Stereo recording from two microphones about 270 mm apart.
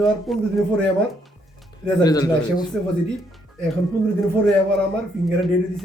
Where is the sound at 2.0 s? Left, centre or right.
Centre.